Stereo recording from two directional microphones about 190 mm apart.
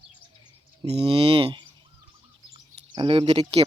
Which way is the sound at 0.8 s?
30° right (ahead or behind).